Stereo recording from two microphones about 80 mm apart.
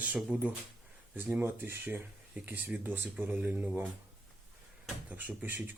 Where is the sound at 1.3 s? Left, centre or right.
Right.